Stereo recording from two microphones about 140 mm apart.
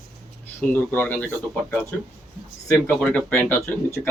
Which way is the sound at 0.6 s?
15° left (ahead or behind).